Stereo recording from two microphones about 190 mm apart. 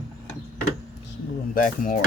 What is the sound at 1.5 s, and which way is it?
Speech, 45° left (ahead or behind).